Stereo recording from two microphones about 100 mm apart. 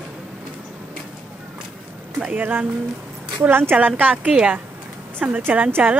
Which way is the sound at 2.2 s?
15° right (ahead or behind).